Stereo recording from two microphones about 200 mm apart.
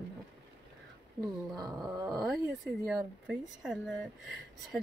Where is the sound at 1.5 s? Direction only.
20° right (ahead or behind).